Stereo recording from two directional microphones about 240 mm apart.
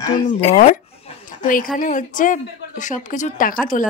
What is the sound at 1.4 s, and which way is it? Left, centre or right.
A woman's voice, left.